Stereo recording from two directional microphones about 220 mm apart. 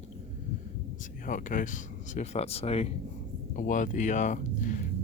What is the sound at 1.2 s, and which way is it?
Speech, 40° left (ahead or behind).